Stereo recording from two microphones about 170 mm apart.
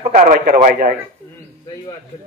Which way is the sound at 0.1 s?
50° right (ahead or behind).